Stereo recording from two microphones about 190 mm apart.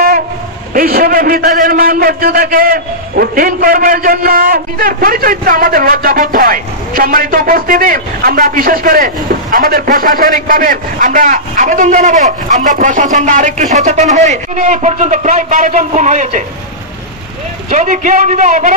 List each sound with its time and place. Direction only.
0.7 s a sound: 50° right (ahead or behind)
1.6 s a man's voice: 50° right (ahead or behind)
17.6 s a man's voice: 40° right (ahead or behind)